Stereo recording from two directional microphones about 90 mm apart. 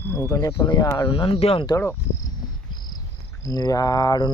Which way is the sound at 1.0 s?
65° left (ahead or behind).